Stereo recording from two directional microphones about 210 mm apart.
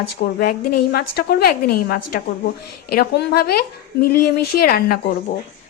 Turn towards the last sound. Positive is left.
turn(degrees=45)  # may be behind; listen again after turning